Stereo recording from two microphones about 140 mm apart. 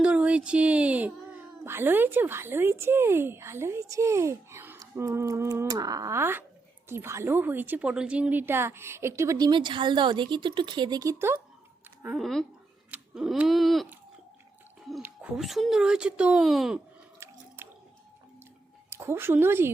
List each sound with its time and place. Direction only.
0.0 s a woman's voice: 10° right (ahead or behind)
9.5 s a woman's voice: 35° right (ahead or behind)
12.2 s speech: centre (ahead or behind)
12.9 s a sound: 5° right (ahead or behind)
15.0 s speech: 10° right (ahead or behind)
17.2 s chewing: 20° right (ahead or behind)
17.6 s drip: 15° right (ahead or behind)
18.9 s speech: 20° right (ahead or behind)